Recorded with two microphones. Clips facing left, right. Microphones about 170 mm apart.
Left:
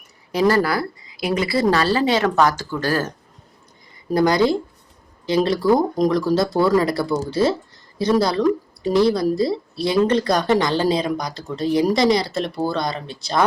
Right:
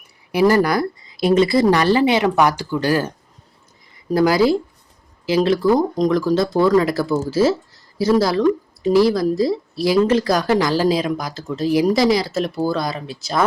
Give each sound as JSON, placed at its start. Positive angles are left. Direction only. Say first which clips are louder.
{"t": 0.3, "sound": "speech", "louder": "right 3 dB", "side_deg": -15}
{"t": 4.1, "sound": "speech", "louder": "right 2 dB", "side_deg": -5}